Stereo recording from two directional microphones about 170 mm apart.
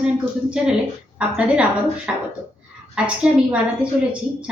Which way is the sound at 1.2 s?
5° right (ahead or behind).